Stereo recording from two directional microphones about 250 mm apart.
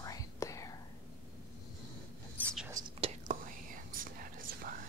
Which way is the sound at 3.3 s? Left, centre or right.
Right.